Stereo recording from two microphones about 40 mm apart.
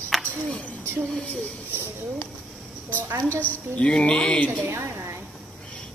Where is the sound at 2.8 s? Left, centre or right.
Left.